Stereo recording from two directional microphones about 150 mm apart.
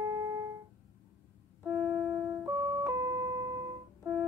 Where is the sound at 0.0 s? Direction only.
20° right (ahead or behind).